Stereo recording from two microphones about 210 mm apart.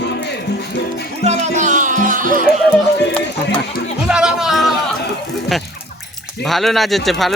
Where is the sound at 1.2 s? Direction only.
30° right (ahead or behind).